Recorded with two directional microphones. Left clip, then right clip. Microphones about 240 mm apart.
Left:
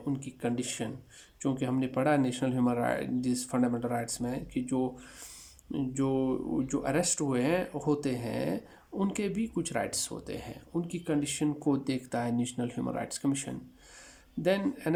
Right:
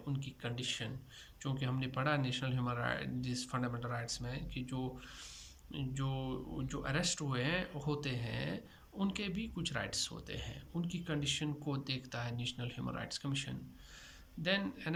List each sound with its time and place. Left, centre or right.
0.0 s speech: left